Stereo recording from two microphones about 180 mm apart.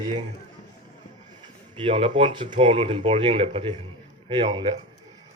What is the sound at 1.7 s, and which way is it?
A man's voice, 30° right (ahead or behind).